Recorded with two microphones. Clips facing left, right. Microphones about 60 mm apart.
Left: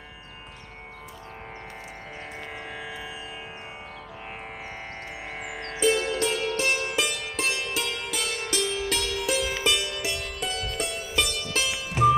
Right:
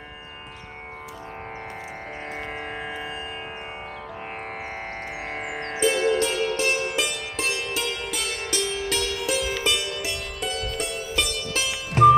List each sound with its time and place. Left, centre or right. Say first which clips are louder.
2.6 s music: right 4 dB; right
5.3 s music: right 4 dB; right
5.8 s music: right 2 dB; centre